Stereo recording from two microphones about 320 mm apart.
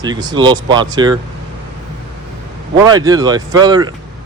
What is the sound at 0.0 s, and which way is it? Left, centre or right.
Speech, centre.